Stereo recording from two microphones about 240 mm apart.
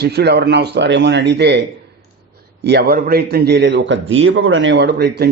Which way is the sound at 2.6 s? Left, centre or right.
Right.